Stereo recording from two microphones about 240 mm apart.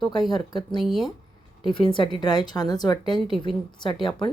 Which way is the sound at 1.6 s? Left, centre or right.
Centre.